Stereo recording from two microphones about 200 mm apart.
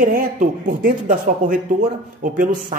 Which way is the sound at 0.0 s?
45° right (ahead or behind).